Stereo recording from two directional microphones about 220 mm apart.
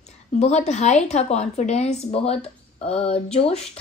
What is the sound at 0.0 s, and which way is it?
A woman's voice, 30° left (ahead or behind).